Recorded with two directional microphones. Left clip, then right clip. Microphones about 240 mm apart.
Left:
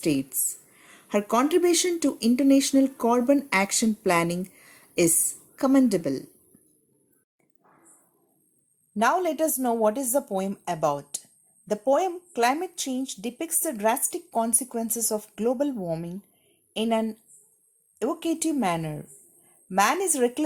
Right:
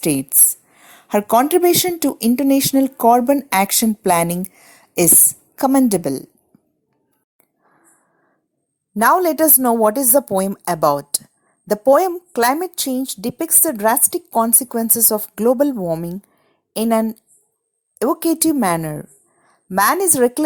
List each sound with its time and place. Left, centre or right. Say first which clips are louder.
0.0 s a woman's voice: right 7 dB; right
9.0 s a woman's voice: right 9 dB; right